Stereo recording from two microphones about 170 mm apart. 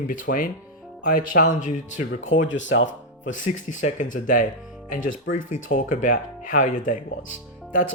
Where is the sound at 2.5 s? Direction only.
90° left.